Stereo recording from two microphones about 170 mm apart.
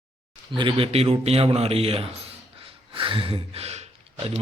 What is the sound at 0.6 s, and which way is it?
A man's voice, 30° right (ahead or behind).